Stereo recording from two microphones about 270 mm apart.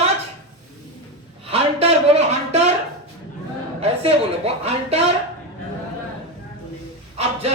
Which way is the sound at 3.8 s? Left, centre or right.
Right.